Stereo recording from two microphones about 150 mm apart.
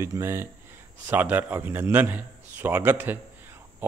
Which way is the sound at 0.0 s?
20° right (ahead or behind).